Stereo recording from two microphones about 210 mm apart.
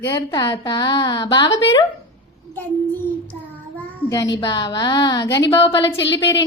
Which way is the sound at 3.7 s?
15° left (ahead or behind).